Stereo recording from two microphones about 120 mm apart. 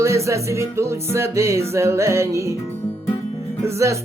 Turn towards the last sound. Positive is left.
turn(degrees=-25)  # may be behind; listen again after turning